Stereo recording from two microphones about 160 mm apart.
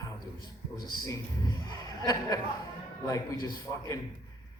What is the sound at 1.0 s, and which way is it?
Speech, 25° left (ahead or behind).